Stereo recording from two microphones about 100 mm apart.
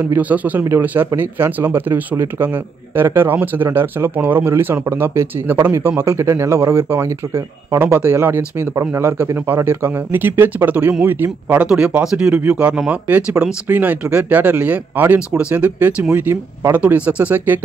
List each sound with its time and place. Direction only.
0.0 s speech: 15° right (ahead or behind)
12.4 s speech: 15° right (ahead or behind)